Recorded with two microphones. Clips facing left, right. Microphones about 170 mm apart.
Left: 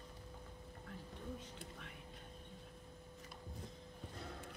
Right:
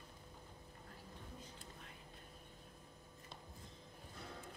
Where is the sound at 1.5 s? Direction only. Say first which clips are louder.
Left 4 dB; 70° left (ahead or behind).